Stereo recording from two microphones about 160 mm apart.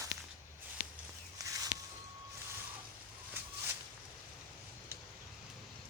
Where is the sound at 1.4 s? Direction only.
20° right (ahead or behind).